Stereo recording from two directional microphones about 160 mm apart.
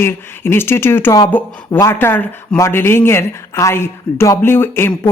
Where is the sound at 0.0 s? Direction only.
15° left (ahead or behind).